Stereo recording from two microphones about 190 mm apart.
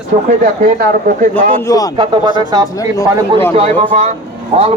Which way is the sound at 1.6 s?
15° left (ahead or behind).